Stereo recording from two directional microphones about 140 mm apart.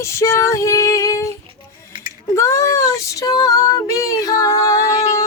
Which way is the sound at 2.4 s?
20° left (ahead or behind).